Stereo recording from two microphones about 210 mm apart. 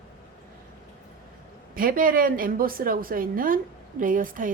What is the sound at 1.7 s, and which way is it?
A woman's voice, 40° right (ahead or behind).